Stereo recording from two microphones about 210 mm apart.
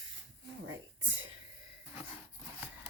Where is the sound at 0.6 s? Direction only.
70° right (ahead or behind).